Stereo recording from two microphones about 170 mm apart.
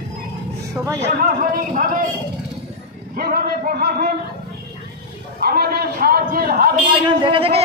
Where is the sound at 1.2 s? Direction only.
55° right (ahead or behind).